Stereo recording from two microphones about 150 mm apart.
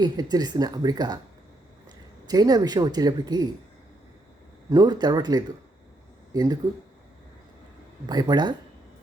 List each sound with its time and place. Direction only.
0.0 s speech: 25° right (ahead or behind)
2.2 s speech: 25° right (ahead or behind)
4.7 s speech: 25° right (ahead or behind)
8.0 s speech: 25° right (ahead or behind)